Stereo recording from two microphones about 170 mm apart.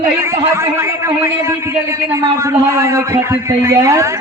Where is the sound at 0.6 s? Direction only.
20° right (ahead or behind).